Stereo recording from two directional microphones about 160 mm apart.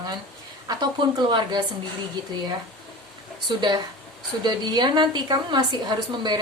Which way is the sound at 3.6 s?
25° right (ahead or behind).